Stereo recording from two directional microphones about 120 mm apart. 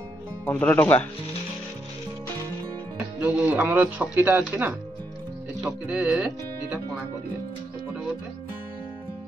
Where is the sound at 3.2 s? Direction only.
10° right (ahead or behind).